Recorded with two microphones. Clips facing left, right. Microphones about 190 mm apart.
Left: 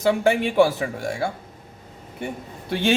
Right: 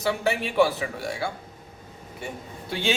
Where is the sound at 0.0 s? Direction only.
50° left (ahead or behind).